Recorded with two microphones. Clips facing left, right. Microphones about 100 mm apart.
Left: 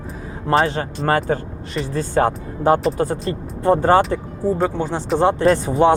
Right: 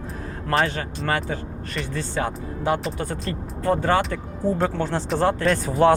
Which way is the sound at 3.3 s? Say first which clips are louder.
Left 4 dB; 25° left (ahead or behind).